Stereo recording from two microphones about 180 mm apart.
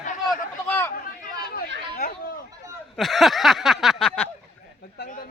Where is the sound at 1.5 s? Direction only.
55° left (ahead or behind).